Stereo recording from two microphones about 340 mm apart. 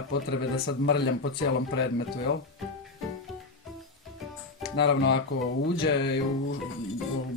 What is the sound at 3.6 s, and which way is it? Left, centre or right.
Music, centre.